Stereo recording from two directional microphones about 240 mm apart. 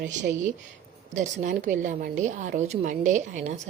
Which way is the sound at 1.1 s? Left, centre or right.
Right.